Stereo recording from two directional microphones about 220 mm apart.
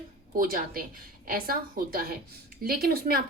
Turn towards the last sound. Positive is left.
turn(degrees=-45)  # may be behind; listen again after turning